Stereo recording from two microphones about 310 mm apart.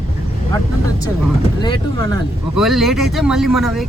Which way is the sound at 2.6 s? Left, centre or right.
Centre.